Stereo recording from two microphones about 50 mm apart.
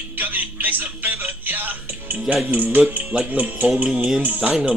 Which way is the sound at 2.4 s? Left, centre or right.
Right.